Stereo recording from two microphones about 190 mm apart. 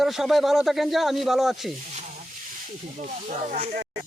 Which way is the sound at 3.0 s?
40° right (ahead or behind).